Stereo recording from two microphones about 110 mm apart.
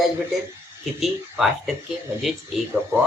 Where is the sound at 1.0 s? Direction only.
Centre (ahead or behind).